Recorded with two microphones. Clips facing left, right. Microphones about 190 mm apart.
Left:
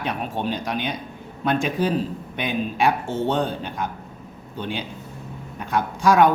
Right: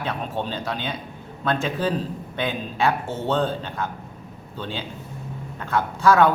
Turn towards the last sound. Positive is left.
turn(degrees=15)  # may be behind; listen again after turning